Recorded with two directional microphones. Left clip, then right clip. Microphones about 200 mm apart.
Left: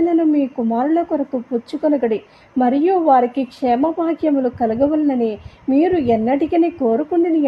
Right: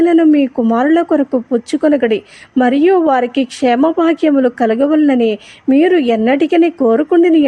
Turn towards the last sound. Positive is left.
turn(degrees=-20)  # may be behind; listen again after turning